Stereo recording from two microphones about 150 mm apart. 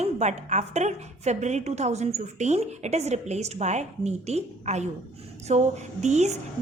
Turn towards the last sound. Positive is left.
turn(degrees=-50)  # may be behind; listen again after turning